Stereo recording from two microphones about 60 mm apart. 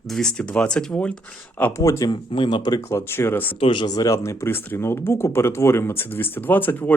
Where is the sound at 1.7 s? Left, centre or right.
Left.